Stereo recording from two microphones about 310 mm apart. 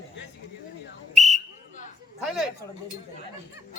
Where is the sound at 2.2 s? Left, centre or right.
Centre.